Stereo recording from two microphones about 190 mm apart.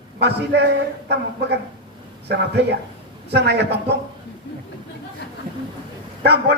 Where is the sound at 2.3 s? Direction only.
60° right (ahead or behind).